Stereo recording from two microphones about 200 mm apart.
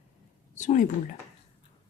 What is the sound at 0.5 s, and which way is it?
Speech, 40° left (ahead or behind).